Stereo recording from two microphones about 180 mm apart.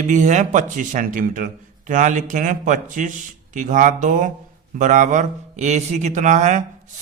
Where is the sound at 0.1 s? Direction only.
40° right (ahead or behind).